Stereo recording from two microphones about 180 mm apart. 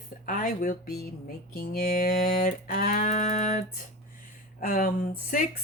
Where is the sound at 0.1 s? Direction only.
50° left (ahead or behind).